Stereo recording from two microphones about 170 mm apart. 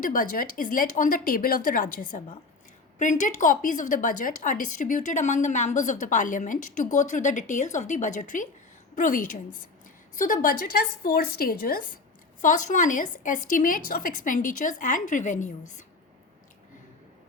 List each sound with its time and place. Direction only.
0.0 s a woman's voice: 55° left (ahead or behind)
12.4 s a woman's voice: 50° left (ahead or behind)